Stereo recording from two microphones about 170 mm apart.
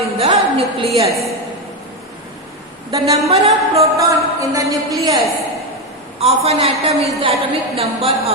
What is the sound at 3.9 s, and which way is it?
A woman's voice, 20° right (ahead or behind).